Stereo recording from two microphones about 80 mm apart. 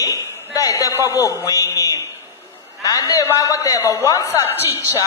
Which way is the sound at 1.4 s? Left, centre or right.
Left.